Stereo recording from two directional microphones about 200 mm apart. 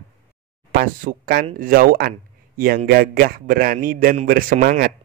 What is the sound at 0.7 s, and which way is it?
A man's voice, 45° right (ahead or behind).